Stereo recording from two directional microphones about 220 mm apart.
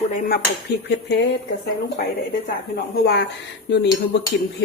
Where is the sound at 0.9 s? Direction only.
50° left (ahead or behind).